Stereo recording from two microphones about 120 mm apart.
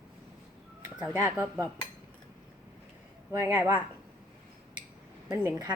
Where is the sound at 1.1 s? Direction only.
15° right (ahead or behind).